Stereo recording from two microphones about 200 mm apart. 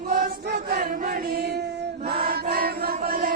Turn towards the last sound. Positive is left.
turn(degrees=-50)  # may be behind; listen again after turning